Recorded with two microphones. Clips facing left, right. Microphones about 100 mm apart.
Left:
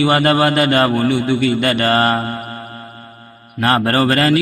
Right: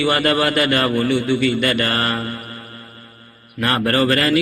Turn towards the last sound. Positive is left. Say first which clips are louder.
# left 2 dB
turn(degrees=30)  # may be behind; listen again after turning